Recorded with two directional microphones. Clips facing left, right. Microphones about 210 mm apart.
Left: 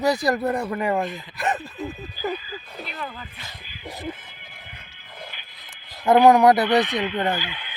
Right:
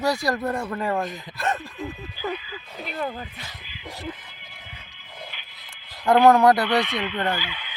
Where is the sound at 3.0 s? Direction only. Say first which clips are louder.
Right 7 dB; 40° right (ahead or behind).